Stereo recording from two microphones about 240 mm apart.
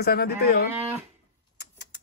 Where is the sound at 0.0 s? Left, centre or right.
Left.